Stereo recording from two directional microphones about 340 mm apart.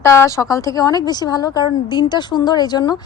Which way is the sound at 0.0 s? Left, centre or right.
Centre.